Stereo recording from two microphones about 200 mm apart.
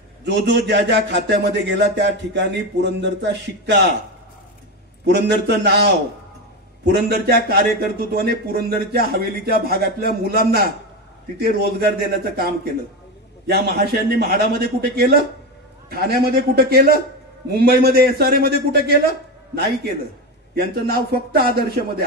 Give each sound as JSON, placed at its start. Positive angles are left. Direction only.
{"t": 0.2, "sound": "a man's voice", "side_deg": -60}
{"t": 5.0, "sound": "a man's voice", "side_deg": -55}